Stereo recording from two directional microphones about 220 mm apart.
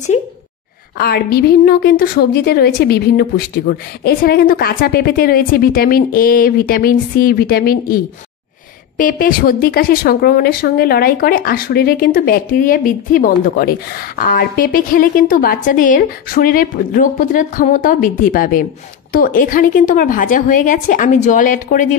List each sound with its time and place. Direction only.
0.1 s speech: 30° left (ahead or behind)
0.9 s a woman's voice: 45° left (ahead or behind)